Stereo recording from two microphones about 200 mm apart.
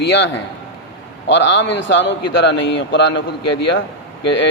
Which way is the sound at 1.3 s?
65° left (ahead or behind).